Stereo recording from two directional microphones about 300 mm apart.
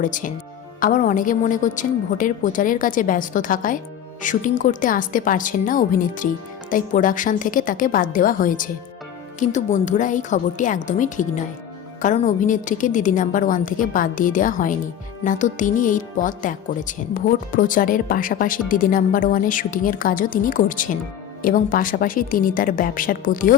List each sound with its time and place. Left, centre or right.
0.0 s speech: left